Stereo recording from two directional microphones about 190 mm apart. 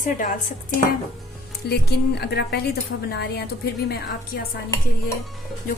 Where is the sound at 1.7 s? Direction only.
60° left (ahead or behind).